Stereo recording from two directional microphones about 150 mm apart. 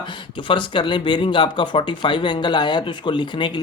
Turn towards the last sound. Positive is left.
turn(degrees=30)  # may be behind; listen again after turning